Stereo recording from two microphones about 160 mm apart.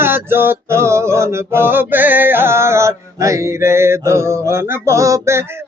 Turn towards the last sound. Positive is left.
turn(degrees=-20)  # may be behind; listen again after turning